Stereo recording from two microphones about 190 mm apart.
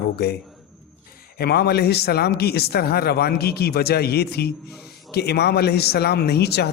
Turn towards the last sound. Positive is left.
turn(degrees=60)  # may be behind; listen again after turning